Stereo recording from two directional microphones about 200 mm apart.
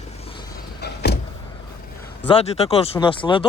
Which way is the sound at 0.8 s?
55° left (ahead or behind).